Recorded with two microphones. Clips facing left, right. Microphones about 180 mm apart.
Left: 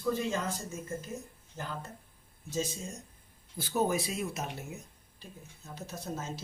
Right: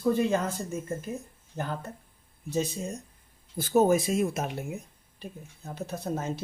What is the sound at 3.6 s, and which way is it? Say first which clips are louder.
Speech: right 8 dB; 45° right (ahead or behind).